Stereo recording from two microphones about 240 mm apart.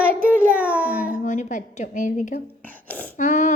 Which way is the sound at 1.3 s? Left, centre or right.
Left.